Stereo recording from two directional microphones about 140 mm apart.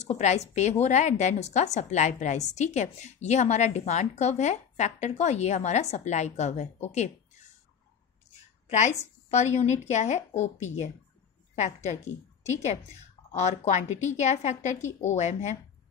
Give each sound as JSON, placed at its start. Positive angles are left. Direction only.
{"t": 0.0, "sound": "a woman's voice", "side_deg": 55}
{"t": 8.6, "sound": "a woman's voice", "side_deg": 55}